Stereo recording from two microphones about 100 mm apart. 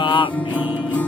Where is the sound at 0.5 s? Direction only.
15° right (ahead or behind).